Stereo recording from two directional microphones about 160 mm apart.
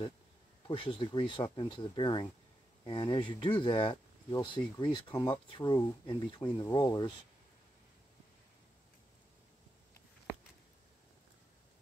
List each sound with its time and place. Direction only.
0.7 s speech: 30° left (ahead or behind)